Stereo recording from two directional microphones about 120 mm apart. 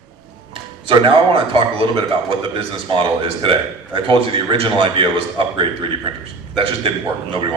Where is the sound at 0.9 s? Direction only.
50° right (ahead or behind).